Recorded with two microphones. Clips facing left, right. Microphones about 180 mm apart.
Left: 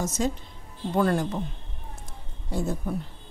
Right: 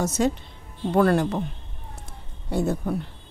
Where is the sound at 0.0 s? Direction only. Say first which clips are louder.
Right 4 dB; 65° right (ahead or behind).